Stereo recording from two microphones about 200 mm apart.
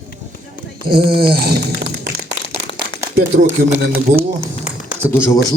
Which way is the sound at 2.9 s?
20° left (ahead or behind).